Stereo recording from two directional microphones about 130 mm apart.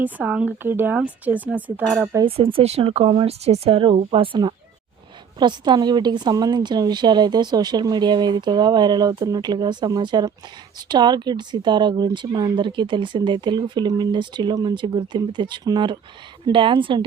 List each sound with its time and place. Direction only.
0.0 s speech: 10° right (ahead or behind)
2.2 s speech: 45° right (ahead or behind)